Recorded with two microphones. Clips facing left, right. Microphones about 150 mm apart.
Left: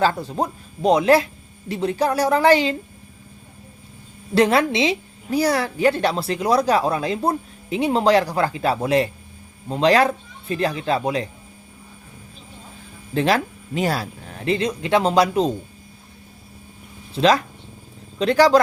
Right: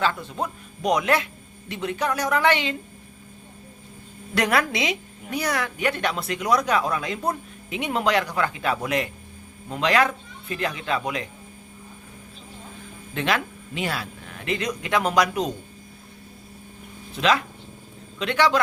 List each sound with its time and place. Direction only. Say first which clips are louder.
0.0 s a woman's voice: left 5 dB; 35° left (ahead or behind)
4.4 s a woman's voice: left 6 dB; 30° left (ahead or behind)
13.1 s a woman's voice: left 6 dB; 35° left (ahead or behind)
17.2 s a woman's voice: left 5 dB; 35° left (ahead or behind)